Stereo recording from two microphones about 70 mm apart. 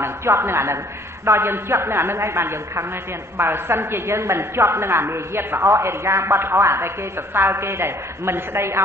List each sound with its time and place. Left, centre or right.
0.0 s a woman's voice: right